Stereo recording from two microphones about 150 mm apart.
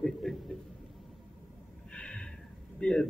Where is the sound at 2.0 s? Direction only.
5° left (ahead or behind).